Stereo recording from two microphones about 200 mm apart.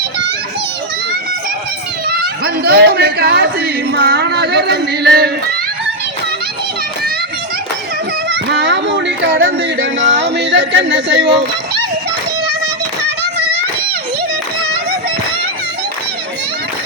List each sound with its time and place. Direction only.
2.0 s speech: 50° right (ahead or behind)
8.3 s a sound: 60° right (ahead or behind)
9.8 s speech: 65° right (ahead or behind)